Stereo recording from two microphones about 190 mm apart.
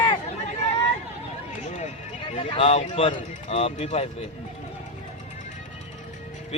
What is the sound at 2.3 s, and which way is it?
A man's voice, 30° left (ahead or behind).